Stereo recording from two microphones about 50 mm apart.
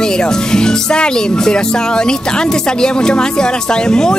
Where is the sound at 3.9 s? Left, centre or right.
Centre.